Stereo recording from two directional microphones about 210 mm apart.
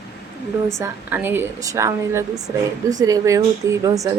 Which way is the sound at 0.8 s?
10° right (ahead or behind).